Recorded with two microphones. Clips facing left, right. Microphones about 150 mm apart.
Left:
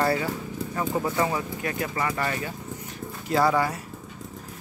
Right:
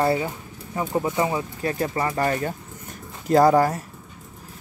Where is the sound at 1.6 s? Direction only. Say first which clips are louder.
Right 5 dB; 35° right (ahead or behind).